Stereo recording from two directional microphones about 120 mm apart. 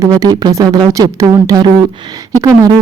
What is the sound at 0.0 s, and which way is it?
Speech, 30° right (ahead or behind).